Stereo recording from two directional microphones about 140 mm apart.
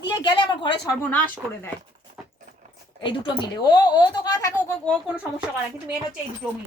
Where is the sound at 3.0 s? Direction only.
35° left (ahead or behind).